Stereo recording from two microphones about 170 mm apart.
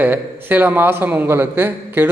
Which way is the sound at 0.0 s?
10° right (ahead or behind).